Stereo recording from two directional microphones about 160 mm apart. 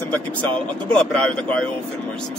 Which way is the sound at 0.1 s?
5° left (ahead or behind).